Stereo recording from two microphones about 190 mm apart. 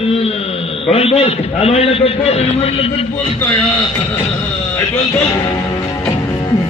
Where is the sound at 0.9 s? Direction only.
30° left (ahead or behind).